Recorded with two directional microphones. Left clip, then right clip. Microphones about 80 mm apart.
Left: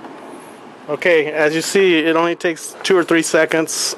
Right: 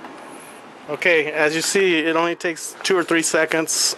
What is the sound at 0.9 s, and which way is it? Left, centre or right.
Speech, centre.